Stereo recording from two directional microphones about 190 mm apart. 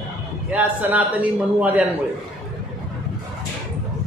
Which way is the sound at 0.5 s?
10° right (ahead or behind).